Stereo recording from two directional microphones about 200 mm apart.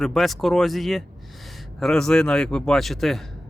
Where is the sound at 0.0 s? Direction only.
Centre (ahead or behind).